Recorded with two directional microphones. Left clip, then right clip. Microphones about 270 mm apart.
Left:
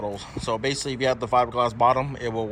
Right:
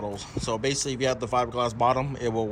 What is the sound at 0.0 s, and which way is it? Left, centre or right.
Speech, centre.